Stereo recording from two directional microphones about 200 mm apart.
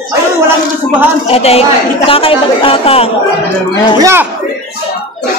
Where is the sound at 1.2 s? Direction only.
30° left (ahead or behind).